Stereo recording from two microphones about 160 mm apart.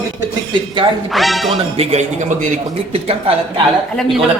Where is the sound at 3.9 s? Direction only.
Centre (ahead or behind).